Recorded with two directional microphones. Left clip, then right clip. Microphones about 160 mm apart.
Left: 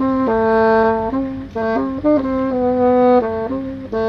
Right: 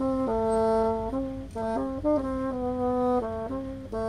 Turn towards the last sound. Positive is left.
turn(degrees=5)  # may be behind; listen again after turning